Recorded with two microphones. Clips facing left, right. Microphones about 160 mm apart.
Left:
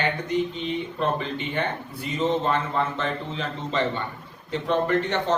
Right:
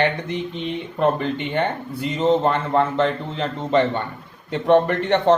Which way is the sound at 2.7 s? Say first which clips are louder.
Right 7 dB; 60° right (ahead or behind).